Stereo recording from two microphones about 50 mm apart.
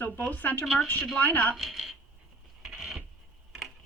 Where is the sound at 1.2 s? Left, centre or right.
Left.